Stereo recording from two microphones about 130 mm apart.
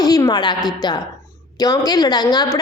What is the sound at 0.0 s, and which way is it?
A woman's voice, 30° left (ahead or behind).